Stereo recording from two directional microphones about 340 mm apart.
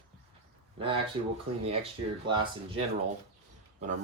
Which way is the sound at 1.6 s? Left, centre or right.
Centre.